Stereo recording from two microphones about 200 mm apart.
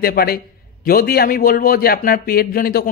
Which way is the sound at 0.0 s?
50° left (ahead or behind).